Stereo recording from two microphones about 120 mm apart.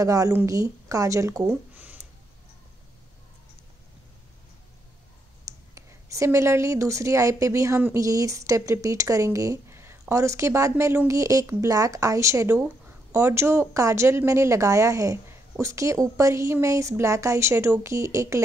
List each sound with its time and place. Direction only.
0.0 s speech: 30° right (ahead or behind)
1.5 s a sound: 15° right (ahead or behind)
5.4 s speech: 25° right (ahead or behind)